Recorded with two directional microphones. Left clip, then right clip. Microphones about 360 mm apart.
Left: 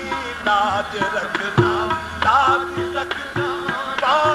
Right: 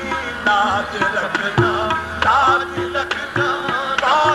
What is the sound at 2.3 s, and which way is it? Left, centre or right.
Music, left.